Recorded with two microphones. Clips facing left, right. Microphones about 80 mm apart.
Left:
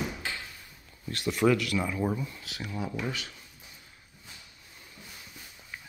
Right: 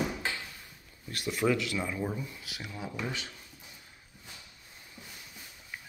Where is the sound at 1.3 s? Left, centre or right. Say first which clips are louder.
Left 4 dB; centre.